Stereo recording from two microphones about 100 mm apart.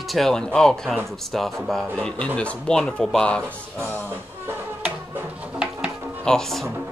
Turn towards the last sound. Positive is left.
turn(degrees=5)  # may be behind; listen again after turning